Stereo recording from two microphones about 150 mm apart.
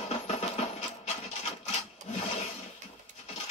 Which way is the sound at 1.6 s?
45° left (ahead or behind).